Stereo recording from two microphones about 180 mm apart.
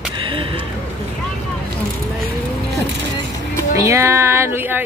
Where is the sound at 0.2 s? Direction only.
30° right (ahead or behind).